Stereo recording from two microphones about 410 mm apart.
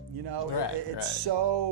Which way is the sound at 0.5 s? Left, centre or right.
Left.